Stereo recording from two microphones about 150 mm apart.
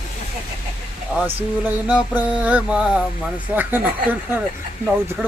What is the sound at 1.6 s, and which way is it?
Speech, 10° right (ahead or behind).